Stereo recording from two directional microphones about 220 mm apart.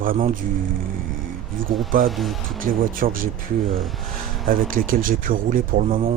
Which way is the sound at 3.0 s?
40° right (ahead or behind).